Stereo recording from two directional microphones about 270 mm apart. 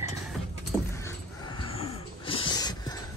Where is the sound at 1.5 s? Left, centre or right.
Left.